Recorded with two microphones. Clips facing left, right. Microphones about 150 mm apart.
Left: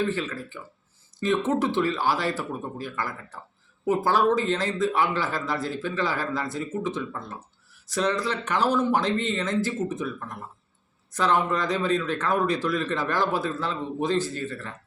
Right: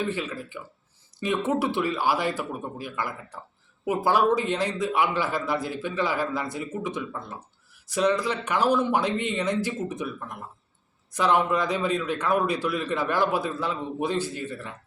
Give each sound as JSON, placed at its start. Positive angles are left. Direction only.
{"t": 0.1, "sound": "a man's voice", "side_deg": -10}